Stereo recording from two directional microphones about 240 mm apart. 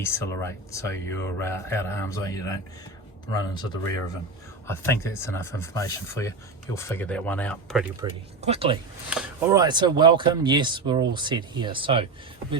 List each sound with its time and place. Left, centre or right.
0.0 s speech: centre
8.4 s speech: right
9.0 s speech: centre
9.6 s speech: centre